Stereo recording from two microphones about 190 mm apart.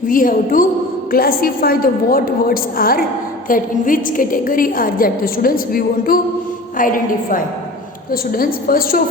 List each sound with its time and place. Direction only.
0.1 s a woman's voice: 45° left (ahead or behind)